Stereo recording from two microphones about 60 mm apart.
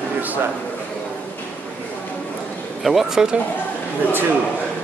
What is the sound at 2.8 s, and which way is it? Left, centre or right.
Speech, centre.